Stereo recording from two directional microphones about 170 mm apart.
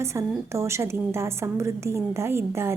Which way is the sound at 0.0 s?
15° right (ahead or behind).